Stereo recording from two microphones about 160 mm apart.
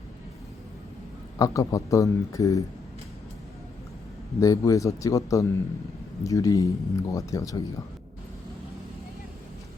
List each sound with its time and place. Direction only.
1.4 s speech: 20° left (ahead or behind)
4.4 s speech: 20° left (ahead or behind)